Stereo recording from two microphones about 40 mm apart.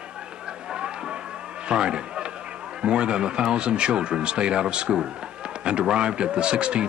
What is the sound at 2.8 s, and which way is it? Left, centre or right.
Speech, right.